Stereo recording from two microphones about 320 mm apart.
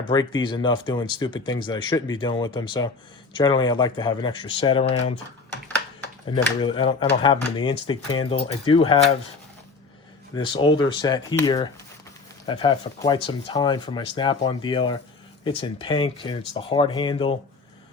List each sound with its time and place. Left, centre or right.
0.1 s speech: centre
6.3 s speech: centre
10.3 s speech: centre